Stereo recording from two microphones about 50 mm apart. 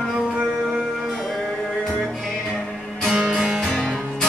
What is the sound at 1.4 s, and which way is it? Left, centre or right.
Music, centre.